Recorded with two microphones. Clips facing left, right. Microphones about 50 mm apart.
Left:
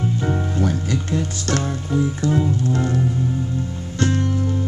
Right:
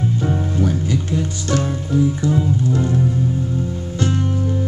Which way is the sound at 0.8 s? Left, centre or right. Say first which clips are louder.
Right 2 dB; left.